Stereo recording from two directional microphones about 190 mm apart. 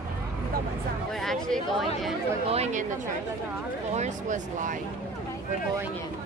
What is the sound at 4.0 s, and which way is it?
Speech, 40° right (ahead or behind).